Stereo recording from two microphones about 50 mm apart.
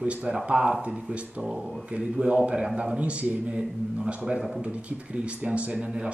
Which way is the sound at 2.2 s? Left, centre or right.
Right.